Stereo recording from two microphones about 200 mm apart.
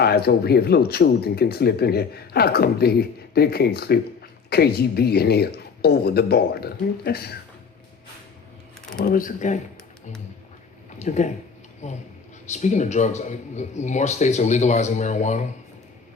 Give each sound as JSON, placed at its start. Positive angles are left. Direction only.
{"t": 0.0, "sound": "speech", "side_deg": 50}
{"t": 9.0, "sound": "speech", "side_deg": 40}
{"t": 11.0, "sound": "speech", "side_deg": 35}